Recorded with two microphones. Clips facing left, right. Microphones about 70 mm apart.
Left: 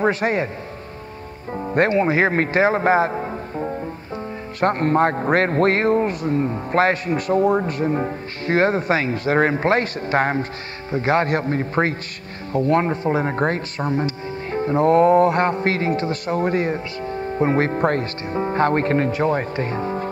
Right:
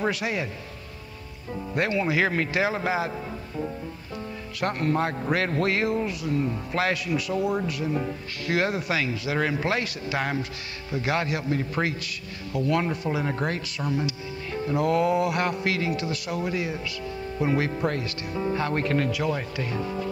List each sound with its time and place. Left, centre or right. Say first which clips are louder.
0.0 s speech: left 7 dB; left
1.5 s speech: left 8 dB; left